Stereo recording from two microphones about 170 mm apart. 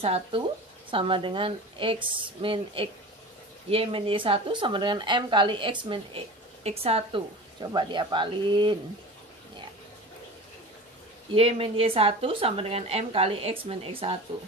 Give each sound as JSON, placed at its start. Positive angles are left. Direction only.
{"t": 0.0, "sound": "a woman's voice", "side_deg": -35}
{"t": 11.3, "sound": "speech", "side_deg": -35}